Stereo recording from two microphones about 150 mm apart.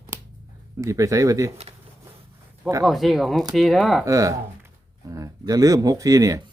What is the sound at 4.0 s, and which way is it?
Speech, 20° right (ahead or behind).